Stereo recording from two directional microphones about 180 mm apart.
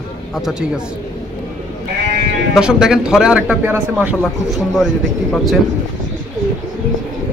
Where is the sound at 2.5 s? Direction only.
5° right (ahead or behind).